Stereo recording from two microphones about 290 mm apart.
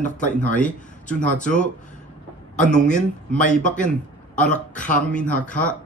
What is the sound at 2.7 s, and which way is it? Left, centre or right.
Speech, left.